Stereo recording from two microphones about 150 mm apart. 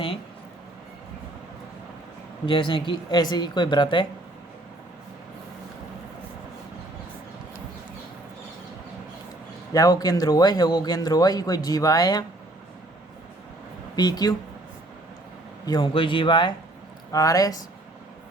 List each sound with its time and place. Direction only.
2.5 s speech: 30° left (ahead or behind)
9.7 s speech: 25° left (ahead or behind)
13.9 s speech: 25° left (ahead or behind)
15.6 s speech: 30° left (ahead or behind)